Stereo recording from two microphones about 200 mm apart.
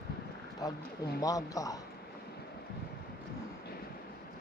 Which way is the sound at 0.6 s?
20° left (ahead or behind).